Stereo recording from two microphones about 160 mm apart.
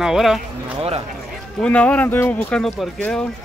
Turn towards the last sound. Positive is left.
turn(degrees=5)  # may be behind; listen again after turning